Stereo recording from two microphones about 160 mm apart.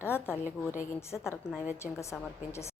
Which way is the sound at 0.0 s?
15° left (ahead or behind).